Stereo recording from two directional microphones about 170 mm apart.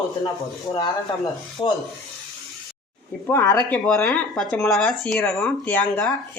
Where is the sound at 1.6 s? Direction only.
25° left (ahead or behind).